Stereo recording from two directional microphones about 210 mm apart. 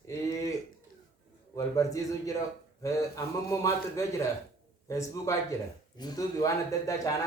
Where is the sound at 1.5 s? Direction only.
15° left (ahead or behind).